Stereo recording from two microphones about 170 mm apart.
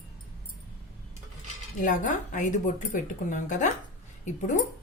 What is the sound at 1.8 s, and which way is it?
Speech, 50° left (ahead or behind).